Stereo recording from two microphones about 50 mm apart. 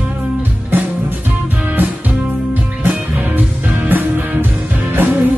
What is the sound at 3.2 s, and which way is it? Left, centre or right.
Music, right.